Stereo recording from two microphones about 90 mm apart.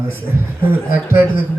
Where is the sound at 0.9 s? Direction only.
25° right (ahead or behind).